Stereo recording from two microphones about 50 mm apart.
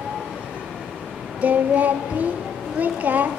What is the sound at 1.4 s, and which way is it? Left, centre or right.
A child's voice, right.